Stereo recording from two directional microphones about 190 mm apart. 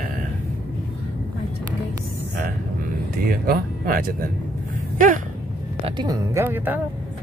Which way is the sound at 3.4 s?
50° right (ahead or behind).